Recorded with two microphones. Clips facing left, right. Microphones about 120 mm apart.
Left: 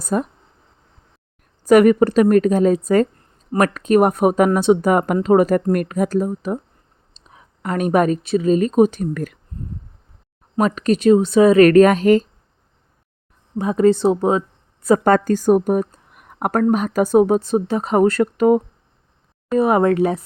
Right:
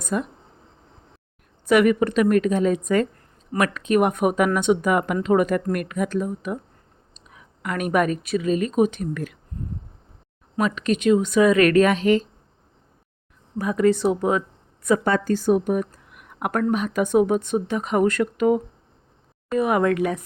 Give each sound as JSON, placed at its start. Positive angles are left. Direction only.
{"t": 0.0, "sound": "speech", "side_deg": 40}
{"t": 1.6, "sound": "speech", "side_deg": 40}
{"t": 10.6, "sound": "speech", "side_deg": 40}
{"t": 13.6, "sound": "speech", "side_deg": 30}
{"t": 14.8, "sound": "a woman's voice", "side_deg": 45}